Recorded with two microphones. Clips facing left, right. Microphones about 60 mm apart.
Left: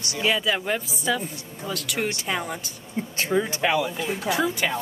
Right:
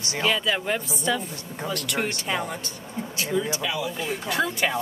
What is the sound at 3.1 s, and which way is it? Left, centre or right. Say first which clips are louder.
Speech: left 2 dB; left.